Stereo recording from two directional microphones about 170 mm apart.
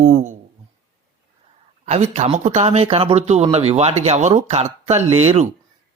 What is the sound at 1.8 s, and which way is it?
Speech, 40° right (ahead or behind).